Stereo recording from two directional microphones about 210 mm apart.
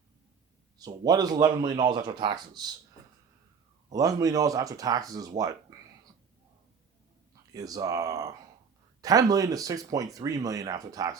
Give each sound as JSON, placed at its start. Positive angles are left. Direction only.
{"t": 0.8, "sound": "speech", "side_deg": -20}
{"t": 3.9, "sound": "speech", "side_deg": -15}
{"t": 7.5, "sound": "speech", "side_deg": -15}